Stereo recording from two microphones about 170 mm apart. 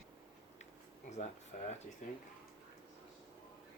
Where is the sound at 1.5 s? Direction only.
55° left (ahead or behind).